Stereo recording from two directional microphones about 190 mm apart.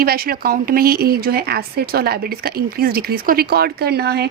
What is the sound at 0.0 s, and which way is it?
Speech, 50° right (ahead or behind).